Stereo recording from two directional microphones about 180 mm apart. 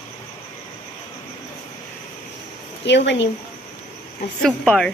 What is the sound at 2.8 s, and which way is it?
Speech, 80° left.